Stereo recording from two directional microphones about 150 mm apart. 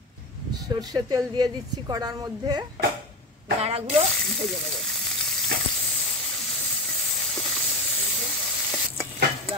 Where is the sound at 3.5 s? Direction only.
45° right (ahead or behind).